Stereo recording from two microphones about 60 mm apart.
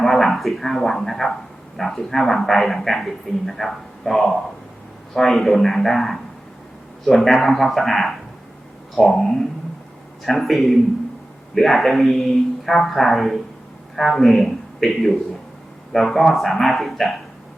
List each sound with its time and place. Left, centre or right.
0.0 s speech: centre
7.2 s a man's voice: centre